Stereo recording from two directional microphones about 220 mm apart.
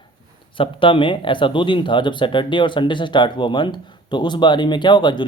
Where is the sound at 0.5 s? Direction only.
25° left (ahead or behind).